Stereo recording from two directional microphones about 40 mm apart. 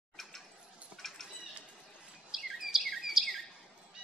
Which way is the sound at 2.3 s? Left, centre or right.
Centre.